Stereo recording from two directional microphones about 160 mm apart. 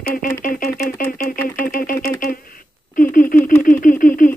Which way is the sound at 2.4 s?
60° left (ahead or behind).